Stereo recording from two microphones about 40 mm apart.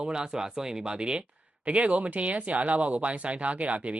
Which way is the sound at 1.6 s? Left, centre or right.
Right.